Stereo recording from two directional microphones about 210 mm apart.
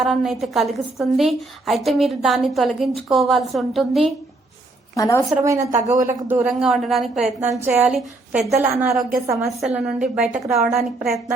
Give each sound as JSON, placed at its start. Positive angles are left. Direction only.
{"t": 0.0, "sound": "a woman's voice", "side_deg": 0}
{"t": 4.9, "sound": "a woman's voice", "side_deg": 15}
{"t": 5.5, "sound": "a woman's voice", "side_deg": -35}
{"t": 6.1, "sound": "a woman's voice", "side_deg": -10}
{"t": 7.6, "sound": "a woman's voice", "side_deg": -10}